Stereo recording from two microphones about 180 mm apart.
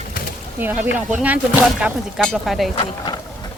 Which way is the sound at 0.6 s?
10° right (ahead or behind).